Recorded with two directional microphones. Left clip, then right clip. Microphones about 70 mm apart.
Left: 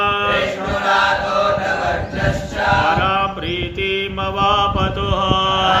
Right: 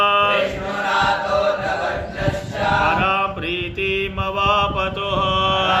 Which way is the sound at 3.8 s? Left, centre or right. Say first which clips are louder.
Left 1 dB; right.